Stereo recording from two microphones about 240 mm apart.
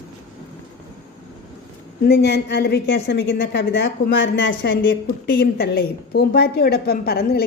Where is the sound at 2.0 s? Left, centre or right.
Left.